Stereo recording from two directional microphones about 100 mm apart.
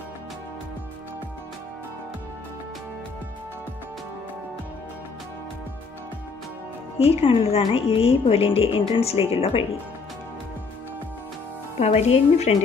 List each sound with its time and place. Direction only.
7.0 s speech: 90° left; by 9.7 s 65° left (ahead or behind)
11.8 s a woman's voice: 90° left